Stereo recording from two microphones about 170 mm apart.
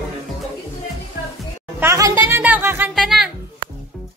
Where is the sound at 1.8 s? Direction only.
15° right (ahead or behind).